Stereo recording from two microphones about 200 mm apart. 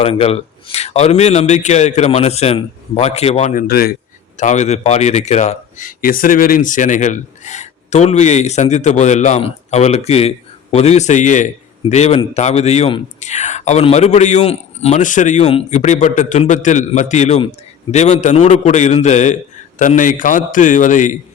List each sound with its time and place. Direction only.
0.0 s speech: 30° left (ahead or behind); by 3.9 s 50° left (ahead or behind)
4.4 s speech: 35° left (ahead or behind)